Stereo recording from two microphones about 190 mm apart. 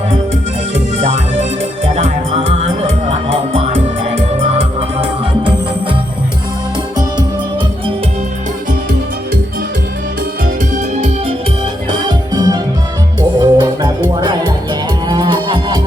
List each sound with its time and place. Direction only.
1.8 s music: 35° right (ahead or behind)
11.9 s music: 25° right (ahead or behind)